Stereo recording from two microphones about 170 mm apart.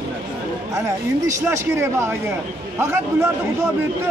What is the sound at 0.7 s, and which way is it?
A man's voice, 20° right (ahead or behind).